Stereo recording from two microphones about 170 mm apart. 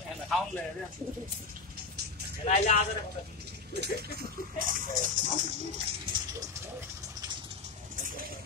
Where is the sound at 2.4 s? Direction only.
45° left (ahead or behind).